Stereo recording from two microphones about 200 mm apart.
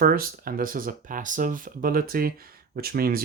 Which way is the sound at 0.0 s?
45° right (ahead or behind).